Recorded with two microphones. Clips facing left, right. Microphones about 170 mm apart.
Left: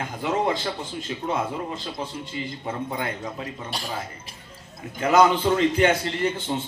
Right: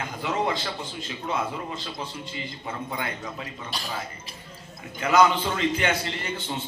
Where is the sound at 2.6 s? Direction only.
45° left (ahead or behind).